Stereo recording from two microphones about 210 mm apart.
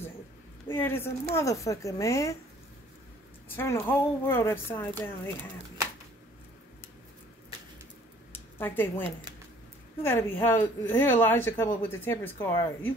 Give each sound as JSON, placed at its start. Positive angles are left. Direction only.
{"t": 0.7, "sound": "a woman's voice", "side_deg": 10}
{"t": 3.4, "sound": "a woman's voice", "side_deg": 10}
{"t": 8.5, "sound": "a woman's voice", "side_deg": 10}